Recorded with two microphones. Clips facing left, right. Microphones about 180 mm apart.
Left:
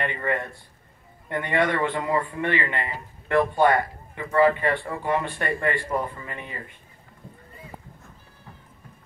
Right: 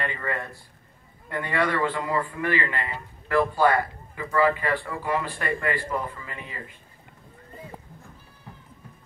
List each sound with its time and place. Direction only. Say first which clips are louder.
0.0 s a man's voice: left 3 dB; 25° left (ahead or behind)